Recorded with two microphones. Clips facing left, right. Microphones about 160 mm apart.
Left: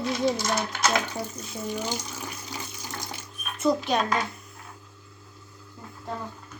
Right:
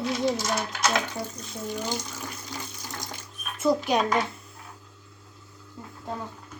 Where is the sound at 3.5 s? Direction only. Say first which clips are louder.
Right 1 dB; 5° right (ahead or behind).